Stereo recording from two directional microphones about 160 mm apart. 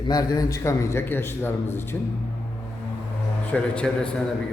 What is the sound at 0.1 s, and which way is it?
A man's voice, 20° left (ahead or behind).